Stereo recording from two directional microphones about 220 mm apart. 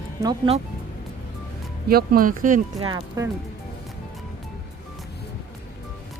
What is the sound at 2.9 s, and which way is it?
Speech, 15° right (ahead or behind).